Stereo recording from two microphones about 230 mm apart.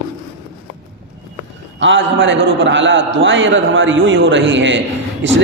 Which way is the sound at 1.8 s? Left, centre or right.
Right.